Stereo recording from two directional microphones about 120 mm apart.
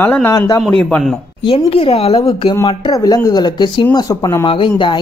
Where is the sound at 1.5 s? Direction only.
50° left (ahead or behind).